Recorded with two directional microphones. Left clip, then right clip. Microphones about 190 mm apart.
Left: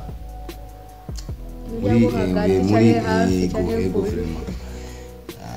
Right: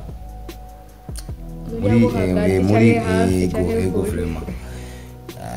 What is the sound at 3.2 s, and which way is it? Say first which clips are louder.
Speech: right 1 dB; 40° right (ahead or behind).